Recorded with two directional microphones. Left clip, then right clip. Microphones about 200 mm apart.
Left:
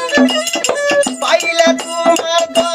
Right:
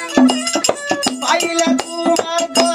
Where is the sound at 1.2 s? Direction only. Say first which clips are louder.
Left 3 dB; 50° left (ahead or behind).